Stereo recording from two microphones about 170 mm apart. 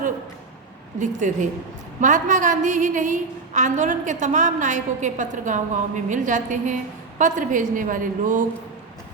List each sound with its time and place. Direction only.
0.9 s a woman's voice: 45° right (ahead or behind)